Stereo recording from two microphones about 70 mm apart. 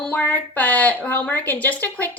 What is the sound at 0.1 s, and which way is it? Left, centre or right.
A woman's voice, left.